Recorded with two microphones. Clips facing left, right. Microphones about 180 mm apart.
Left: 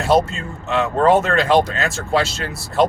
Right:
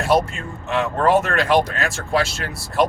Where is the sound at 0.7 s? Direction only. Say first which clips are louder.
Left 2 dB; 20° left (ahead or behind).